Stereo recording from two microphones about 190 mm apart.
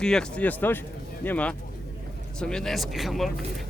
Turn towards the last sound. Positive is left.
turn(degrees=0)  # may be behind; listen again after turning